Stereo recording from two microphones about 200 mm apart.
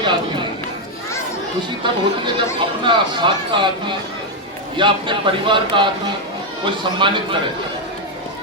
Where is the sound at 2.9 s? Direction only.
25° right (ahead or behind).